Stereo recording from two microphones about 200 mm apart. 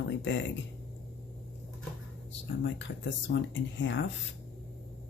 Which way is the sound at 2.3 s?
65° left (ahead or behind).